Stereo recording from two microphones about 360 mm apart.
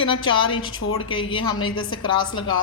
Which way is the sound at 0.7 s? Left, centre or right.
Left.